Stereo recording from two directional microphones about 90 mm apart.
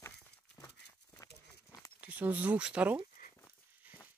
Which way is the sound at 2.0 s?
20° right (ahead or behind).